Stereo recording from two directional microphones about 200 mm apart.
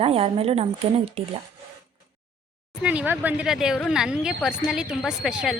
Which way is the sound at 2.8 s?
5° right (ahead or behind).